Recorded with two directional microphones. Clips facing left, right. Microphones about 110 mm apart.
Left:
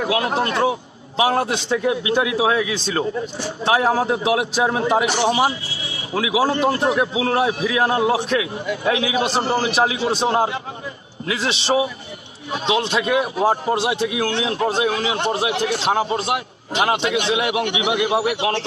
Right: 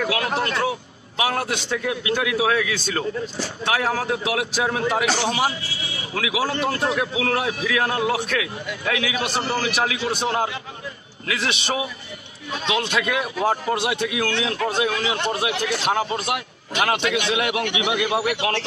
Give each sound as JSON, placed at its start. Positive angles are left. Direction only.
{"t": 0.0, "sound": "a man's voice", "side_deg": 25}